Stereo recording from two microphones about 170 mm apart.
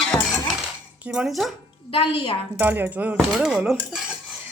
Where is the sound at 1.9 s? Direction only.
30° left (ahead or behind).